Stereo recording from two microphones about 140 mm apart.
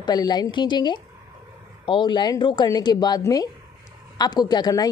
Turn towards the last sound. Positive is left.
turn(degrees=30)  # may be behind; listen again after turning